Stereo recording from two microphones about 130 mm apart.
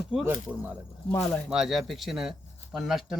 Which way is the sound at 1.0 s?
20° left (ahead or behind).